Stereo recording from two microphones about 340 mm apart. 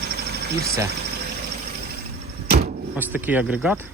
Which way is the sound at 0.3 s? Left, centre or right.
Right.